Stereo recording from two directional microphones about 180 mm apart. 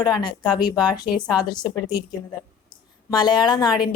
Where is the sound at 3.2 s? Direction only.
25° left (ahead or behind).